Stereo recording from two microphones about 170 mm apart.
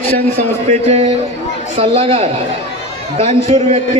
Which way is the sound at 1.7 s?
35° right (ahead or behind).